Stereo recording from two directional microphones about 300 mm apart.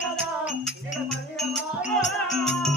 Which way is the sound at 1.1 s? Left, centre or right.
Centre.